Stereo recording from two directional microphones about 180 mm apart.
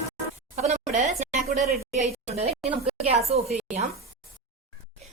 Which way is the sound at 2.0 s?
35° right (ahead or behind).